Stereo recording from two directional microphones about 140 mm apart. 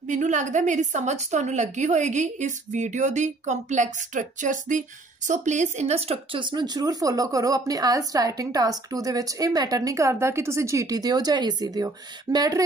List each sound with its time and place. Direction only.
0.0 s a woman's voice: 60° right (ahead or behind); by 12.6 s 25° right (ahead or behind)